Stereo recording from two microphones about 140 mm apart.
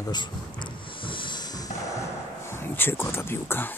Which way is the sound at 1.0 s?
35° left (ahead or behind).